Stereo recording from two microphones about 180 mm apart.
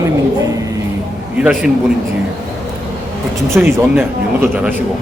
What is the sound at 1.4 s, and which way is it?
Speech, 5° right (ahead or behind).